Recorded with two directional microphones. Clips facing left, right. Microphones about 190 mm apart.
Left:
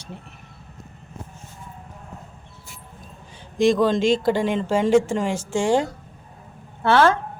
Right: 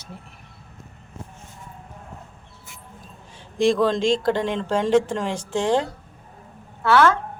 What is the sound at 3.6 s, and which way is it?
Speech, centre (ahead or behind).